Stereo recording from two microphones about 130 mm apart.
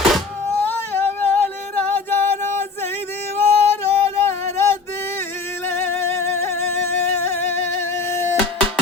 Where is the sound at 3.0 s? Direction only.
55° right (ahead or behind).